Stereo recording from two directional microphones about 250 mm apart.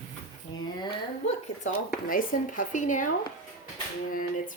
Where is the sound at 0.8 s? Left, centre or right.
Left.